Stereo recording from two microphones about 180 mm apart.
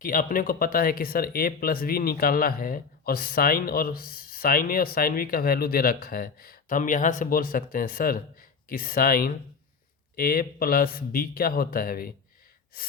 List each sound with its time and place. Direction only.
0.0 s speech: 50° left (ahead or behind)